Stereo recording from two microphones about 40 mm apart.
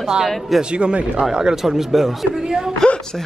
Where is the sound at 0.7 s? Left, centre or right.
Right.